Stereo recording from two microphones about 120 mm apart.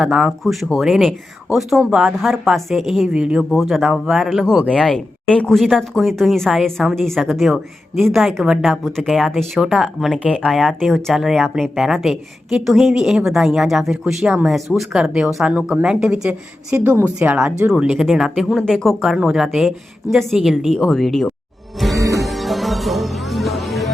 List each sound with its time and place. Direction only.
0.0 s speech: 5° right (ahead or behind)
16.7 s a woman's voice: 20° right (ahead or behind)
17.2 s speech: 5° right (ahead or behind)
21.9 s music: 25° right (ahead or behind)
22.2 s music: centre (ahead or behind)